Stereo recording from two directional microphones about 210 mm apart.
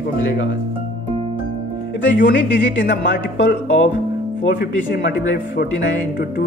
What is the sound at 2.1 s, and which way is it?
A woman's voice, 50° left (ahead or behind).